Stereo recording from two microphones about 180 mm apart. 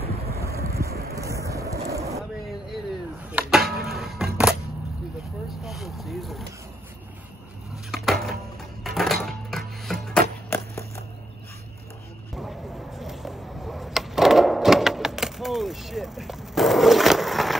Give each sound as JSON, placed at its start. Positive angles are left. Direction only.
{"t": 0.3, "sound": "wind noise", "side_deg": -15}
{"t": 0.7, "sound": "wind", "side_deg": -15}
{"t": 1.1, "sound": "vehicle", "side_deg": -15}
{"t": 3.3, "sound": "music", "side_deg": -5}
{"t": 5.6, "sound": "vehicle", "side_deg": 0}
{"t": 7.9, "sound": "a sound", "side_deg": 0}
{"t": 8.8, "sound": "music", "side_deg": 0}
{"t": 10.5, "sound": "a sound", "side_deg": 15}
{"t": 12.4, "sound": "a sound", "side_deg": 0}